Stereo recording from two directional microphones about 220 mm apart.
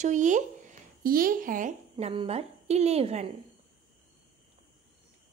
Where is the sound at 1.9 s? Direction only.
20° right (ahead or behind).